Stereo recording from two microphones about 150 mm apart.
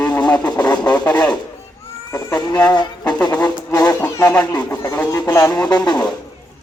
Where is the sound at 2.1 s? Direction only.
25° left (ahead or behind).